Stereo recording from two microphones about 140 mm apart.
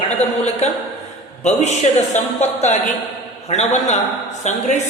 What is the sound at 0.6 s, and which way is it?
A man's voice, 50° left (ahead or behind).